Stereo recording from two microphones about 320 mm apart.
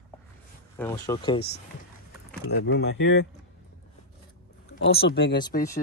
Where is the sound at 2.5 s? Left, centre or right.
Left.